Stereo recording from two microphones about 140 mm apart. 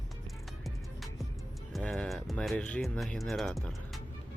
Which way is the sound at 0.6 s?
Centre (ahead or behind).